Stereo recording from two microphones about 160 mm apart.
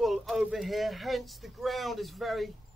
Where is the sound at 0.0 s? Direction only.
Centre (ahead or behind).